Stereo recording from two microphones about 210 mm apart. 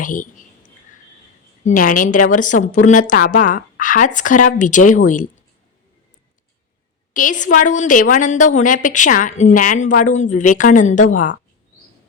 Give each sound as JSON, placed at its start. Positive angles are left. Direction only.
{"t": 0.0, "sound": "a sound", "side_deg": 40}
{"t": 1.6, "sound": "a woman's voice", "side_deg": 40}
{"t": 7.1, "sound": "a woman's voice", "side_deg": 40}